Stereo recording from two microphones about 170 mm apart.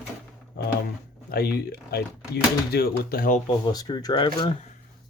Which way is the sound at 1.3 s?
65° left (ahead or behind).